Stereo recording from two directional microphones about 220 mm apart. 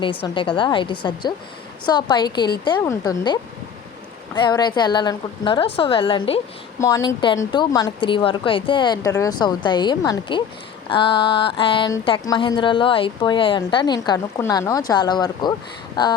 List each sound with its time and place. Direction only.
0.0 s speech: 25° left (ahead or behind)
4.4 s speech: 20° left (ahead or behind)
6.7 s speech: 15° left (ahead or behind)